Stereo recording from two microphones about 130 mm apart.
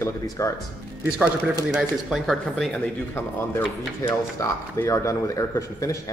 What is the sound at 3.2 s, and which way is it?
Speech, 20° left (ahead or behind).